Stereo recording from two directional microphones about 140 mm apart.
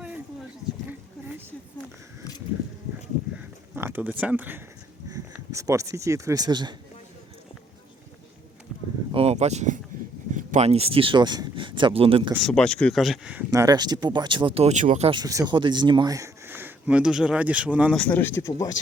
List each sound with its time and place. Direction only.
3.8 s speech: 15° right (ahead or behind); by 6.7 s 30° right (ahead or behind)
9.1 s a sound: 50° right (ahead or behind)
10.3 s speech: 55° right (ahead or behind); by 12.3 s 40° right (ahead or behind)
12.4 s speech: 5° left (ahead or behind)
13.5 s speech: 25° right (ahead or behind); by 15.1 s 55° right (ahead or behind)
15.1 s speech: 25° right (ahead or behind); by 17.9 s 10° right (ahead or behind)
17.9 s speech: 10° left (ahead or behind)